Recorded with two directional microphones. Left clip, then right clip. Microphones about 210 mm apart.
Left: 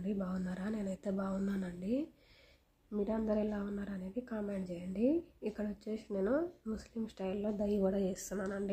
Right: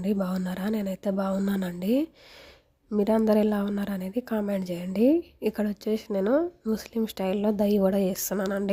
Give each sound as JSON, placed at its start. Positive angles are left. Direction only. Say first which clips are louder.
{"t": 0.0, "sound": "a woman's voice", "louder": "right 11 dB", "side_deg": -50}